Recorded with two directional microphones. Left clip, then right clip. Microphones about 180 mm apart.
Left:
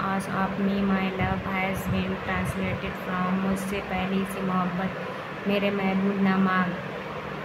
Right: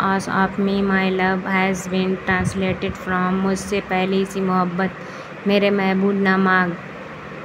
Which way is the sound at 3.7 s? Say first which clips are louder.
Right 9 dB; 40° right (ahead or behind).